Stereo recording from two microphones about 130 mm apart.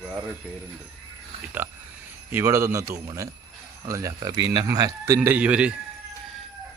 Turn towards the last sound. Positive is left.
turn(degrees=-10)  # may be behind; listen again after turning